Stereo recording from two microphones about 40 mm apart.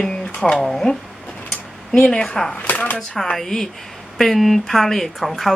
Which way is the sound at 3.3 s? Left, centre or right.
Centre.